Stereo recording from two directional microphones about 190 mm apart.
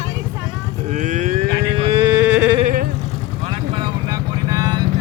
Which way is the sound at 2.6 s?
45° right (ahead or behind).